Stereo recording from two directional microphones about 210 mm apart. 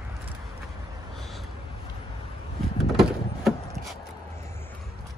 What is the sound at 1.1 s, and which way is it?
Vehicle, centre (ahead or behind).